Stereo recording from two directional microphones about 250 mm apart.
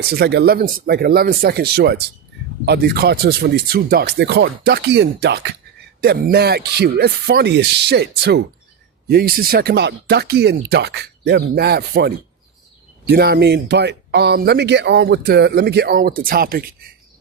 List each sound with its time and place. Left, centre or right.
0.0 s speech: right